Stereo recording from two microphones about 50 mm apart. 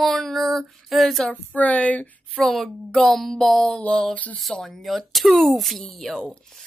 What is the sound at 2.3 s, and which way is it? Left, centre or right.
Speech, centre.